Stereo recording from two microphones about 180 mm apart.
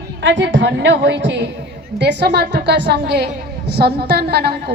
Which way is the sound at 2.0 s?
70° right (ahead or behind).